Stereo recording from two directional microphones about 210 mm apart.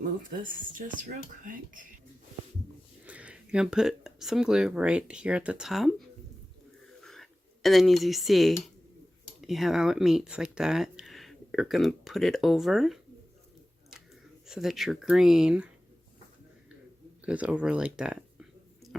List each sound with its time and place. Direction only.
0.2 s speech: 40° right (ahead or behind)
3.1 s speech: 5° right (ahead or behind)
7.0 s a sound: centre (ahead or behind)
9.4 s speech: centre (ahead or behind)
14.4 s speech: centre (ahead or behind)
17.2 s speech: 5° right (ahead or behind)